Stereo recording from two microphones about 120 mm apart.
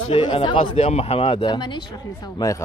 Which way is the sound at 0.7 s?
65° left (ahead or behind).